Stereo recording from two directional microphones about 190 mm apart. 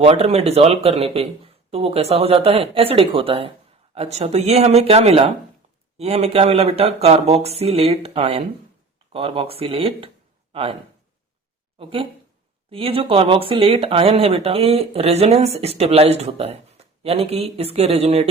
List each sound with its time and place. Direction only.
0.0 s speech: 35° right (ahead or behind)
11.8 s speech: 30° right (ahead or behind)